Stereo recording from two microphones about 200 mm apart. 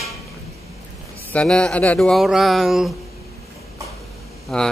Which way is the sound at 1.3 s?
5° left (ahead or behind).